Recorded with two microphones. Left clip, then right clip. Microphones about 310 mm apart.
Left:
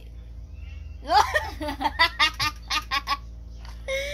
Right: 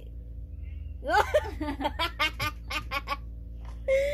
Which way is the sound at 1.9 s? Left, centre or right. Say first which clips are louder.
Left 8 dB; centre.